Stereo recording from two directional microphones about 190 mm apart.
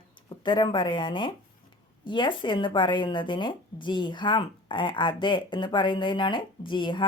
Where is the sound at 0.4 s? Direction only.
25° left (ahead or behind).